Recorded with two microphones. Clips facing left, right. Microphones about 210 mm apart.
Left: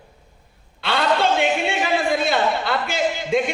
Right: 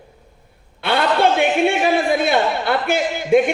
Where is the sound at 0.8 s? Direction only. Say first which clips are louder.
Right 3 dB; 55° right (ahead or behind).